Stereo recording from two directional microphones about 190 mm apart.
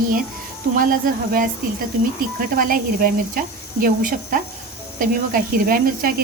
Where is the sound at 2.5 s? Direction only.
50° right (ahead or behind).